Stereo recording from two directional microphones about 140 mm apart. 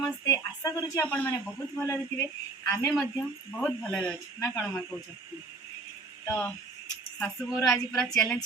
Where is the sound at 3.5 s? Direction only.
5° left (ahead or behind).